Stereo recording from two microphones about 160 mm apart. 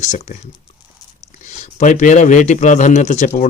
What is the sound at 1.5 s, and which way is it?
Speech, 45° left (ahead or behind).